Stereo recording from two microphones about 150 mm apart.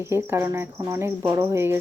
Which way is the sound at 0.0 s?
15° right (ahead or behind).